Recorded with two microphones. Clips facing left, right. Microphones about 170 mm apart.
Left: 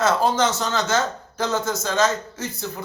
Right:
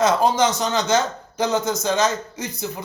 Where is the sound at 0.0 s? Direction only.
15° right (ahead or behind).